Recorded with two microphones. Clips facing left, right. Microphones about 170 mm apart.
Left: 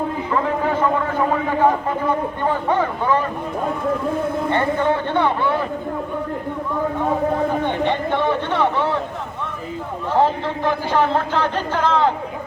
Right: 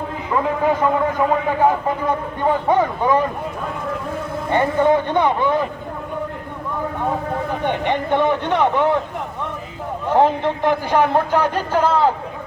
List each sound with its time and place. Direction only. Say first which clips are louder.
0.6 s a sound: right 2 dB; 15° right (ahead or behind)
2.5 s a man's voice: right 4 dB; 15° right (ahead or behind)
4.5 s a man's voice: right 6 dB; 15° right (ahead or behind)
7.6 s a man's voice: even; 15° right (ahead or behind)
10.2 s a man's voice: right 2 dB; 15° right (ahead or behind)